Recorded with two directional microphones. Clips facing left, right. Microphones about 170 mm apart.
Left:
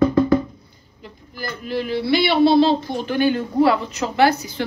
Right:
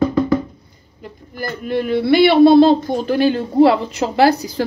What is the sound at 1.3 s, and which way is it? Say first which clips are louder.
A man's voice: right 5 dB; 50° right (ahead or behind).